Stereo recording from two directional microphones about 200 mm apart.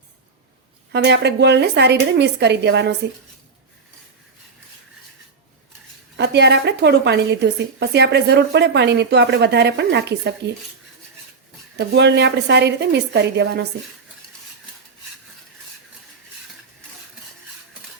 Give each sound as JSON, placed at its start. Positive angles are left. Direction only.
{"t": 0.9, "sound": "a woman's voice", "side_deg": -60}
{"t": 6.1, "sound": "a woman's voice", "side_deg": -55}
{"t": 11.8, "sound": "a woman's voice", "side_deg": -60}